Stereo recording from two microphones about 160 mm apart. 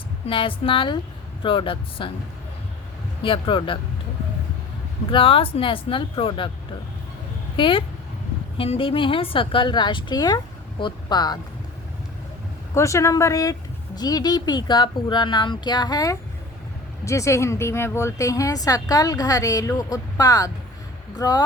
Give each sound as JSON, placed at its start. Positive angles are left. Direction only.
{"t": 0.3, "sound": "a woman's voice", "side_deg": 35}
{"t": 3.2, "sound": "a woman's voice", "side_deg": 30}
{"t": 5.1, "sound": "a woman's voice", "side_deg": 35}
{"t": 7.5, "sound": "a woman's voice", "side_deg": 30}
{"t": 12.7, "sound": "speech", "side_deg": 20}